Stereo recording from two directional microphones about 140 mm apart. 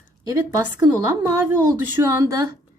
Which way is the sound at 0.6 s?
20° right (ahead or behind).